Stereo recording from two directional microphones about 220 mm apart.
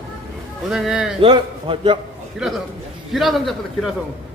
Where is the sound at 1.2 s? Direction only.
25° right (ahead or behind).